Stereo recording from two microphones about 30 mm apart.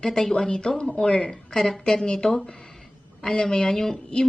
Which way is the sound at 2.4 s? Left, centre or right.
Left.